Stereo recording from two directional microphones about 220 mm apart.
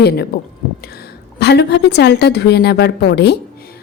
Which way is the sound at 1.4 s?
50° left (ahead or behind).